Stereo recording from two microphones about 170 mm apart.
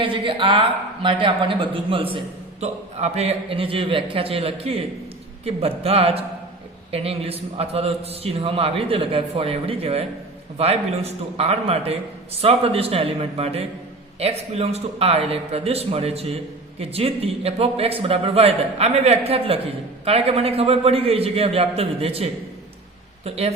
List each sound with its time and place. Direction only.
0.0 s a woman's voice: 30° right (ahead or behind)